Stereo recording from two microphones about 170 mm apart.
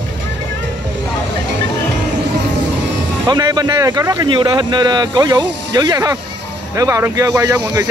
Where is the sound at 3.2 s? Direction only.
25° right (ahead or behind).